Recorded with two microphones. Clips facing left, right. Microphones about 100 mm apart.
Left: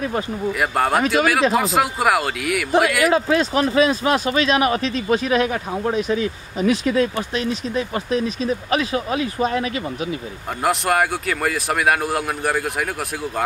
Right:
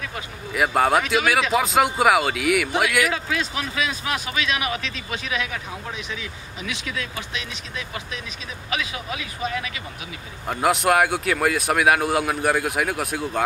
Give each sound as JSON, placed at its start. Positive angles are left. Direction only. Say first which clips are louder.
{"t": 0.6, "sound": "speech", "louder": "right 1 dB", "side_deg": 0}
{"t": 3.0, "sound": "speech", "louder": "left 6 dB", "side_deg": 40}
{"t": 10.6, "sound": "speech", "louder": "even", "side_deg": 0}